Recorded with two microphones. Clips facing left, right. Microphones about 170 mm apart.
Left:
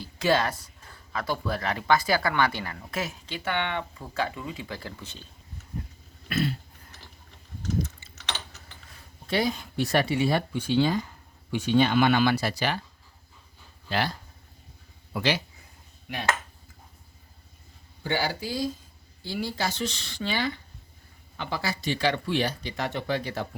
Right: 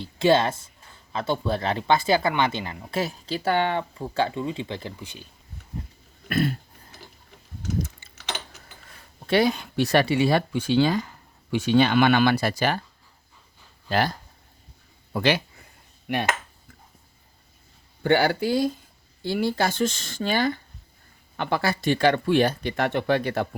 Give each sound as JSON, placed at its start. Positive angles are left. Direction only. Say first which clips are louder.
{"t": 0.0, "sound": "speech", "louder": "right 5 dB", "side_deg": -25}
{"t": 3.0, "sound": "speech", "louder": "right 6 dB", "side_deg": -35}
{"t": 6.2, "sound": "cough", "louder": "right 3 dB", "side_deg": -50}
{"t": 9.2, "sound": "speech", "louder": "right 6 dB", "side_deg": -70}
{"t": 13.9, "sound": "speech", "louder": "right 5 dB", "side_deg": -45}
{"t": 15.2, "sound": "speech", "louder": "right 4 dB", "side_deg": -60}
{"t": 18.0, "sound": "speech", "louder": "right 8 dB", "side_deg": -60}